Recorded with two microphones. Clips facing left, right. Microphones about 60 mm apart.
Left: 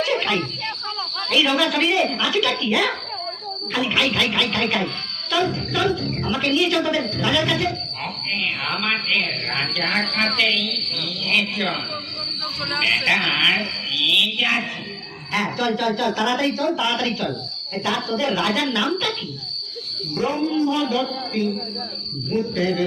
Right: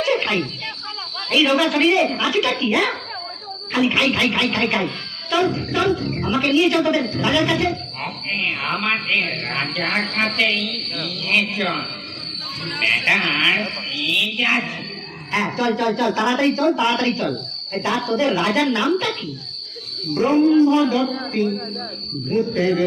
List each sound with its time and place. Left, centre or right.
0.0 s cricket: centre
1.3 s speech: centre
8.6 s speech: centre
12.8 s speech: centre
14.0 s a woman's voice: right
15.3 s speech: right
16.1 s a woman's voice: right
20.1 s speech: right